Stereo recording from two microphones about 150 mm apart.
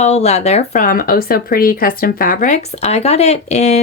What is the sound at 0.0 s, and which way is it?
Speech, 45° left (ahead or behind).